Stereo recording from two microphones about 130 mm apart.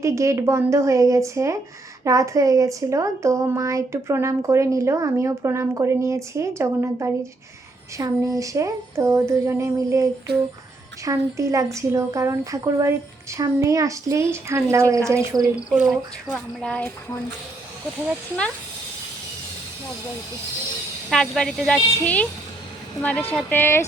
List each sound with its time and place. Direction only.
0.0 s speech: 25° right (ahead or behind)
15.5 s speech: 10° right (ahead or behind)
16.3 s speech: 10° left (ahead or behind)
21.1 s speech: 5° left (ahead or behind)